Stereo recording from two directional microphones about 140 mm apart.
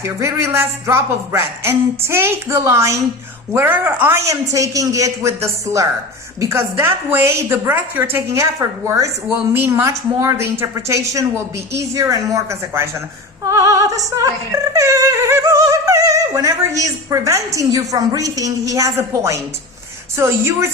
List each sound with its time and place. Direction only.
0.0 s speech: 20° right (ahead or behind)